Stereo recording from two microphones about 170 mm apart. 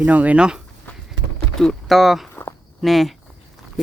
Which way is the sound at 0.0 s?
10° right (ahead or behind).